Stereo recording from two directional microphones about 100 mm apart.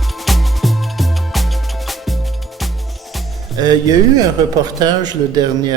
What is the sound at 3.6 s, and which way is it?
A man's voice, 40° right (ahead or behind).